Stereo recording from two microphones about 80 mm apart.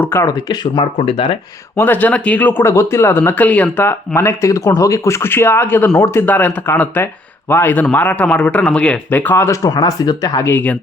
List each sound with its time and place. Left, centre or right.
0.1 s speech: left
0.6 s speech: left
1.8 s speech: left
2.6 s speech: left; by 3.8 s centre
3.8 s speech: left
5.2 s speech: left; by 9.0 s centre
9.0 s speech: left
9.6 s speech: left
10.4 s speech: left